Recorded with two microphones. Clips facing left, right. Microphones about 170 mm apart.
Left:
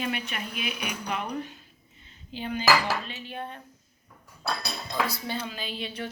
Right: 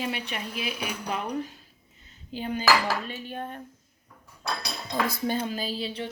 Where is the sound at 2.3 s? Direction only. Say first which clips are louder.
Even; 40° right (ahead or behind).